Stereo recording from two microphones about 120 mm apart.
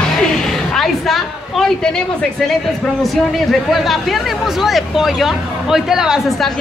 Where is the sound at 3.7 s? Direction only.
Centre (ahead or behind).